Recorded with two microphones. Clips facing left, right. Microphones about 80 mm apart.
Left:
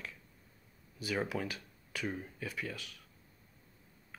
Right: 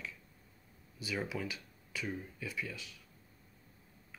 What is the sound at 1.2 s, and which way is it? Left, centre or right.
Speech, left.